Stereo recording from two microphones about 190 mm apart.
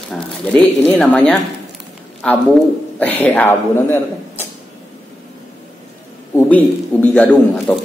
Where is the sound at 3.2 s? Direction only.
10° left (ahead or behind).